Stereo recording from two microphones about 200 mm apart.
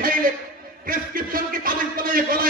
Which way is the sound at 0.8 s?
45° right (ahead or behind).